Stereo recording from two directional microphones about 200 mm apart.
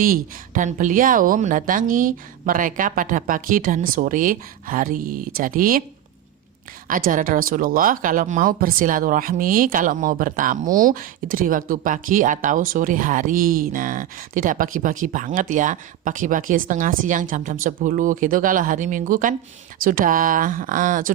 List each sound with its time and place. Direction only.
0.0 s speech: 45° right (ahead or behind)
7.1 s speech: 45° right (ahead or behind)